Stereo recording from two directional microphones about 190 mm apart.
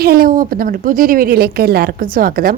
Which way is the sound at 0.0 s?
55° right (ahead or behind).